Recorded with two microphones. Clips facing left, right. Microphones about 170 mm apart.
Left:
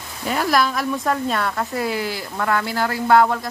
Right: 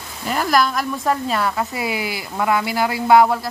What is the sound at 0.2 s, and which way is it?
Speech, centre (ahead or behind).